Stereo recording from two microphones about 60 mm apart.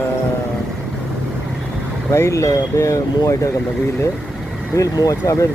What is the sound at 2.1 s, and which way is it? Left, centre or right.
Speech, left.